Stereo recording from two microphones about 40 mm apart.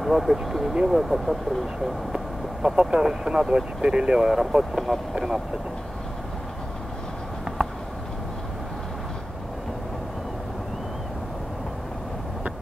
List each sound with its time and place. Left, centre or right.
0.0 s speech: centre
2.1 s a sound: centre
3.0 s speech: centre